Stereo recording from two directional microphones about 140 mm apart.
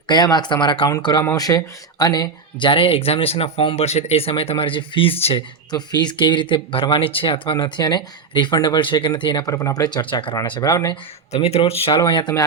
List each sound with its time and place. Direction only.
0.1 s speech: 30° left (ahead or behind)
1.2 s speech: 20° left (ahead or behind)
10.7 s speech: 25° left (ahead or behind)
11.3 s speech: 45° left (ahead or behind); by 12.3 s 30° left (ahead or behind)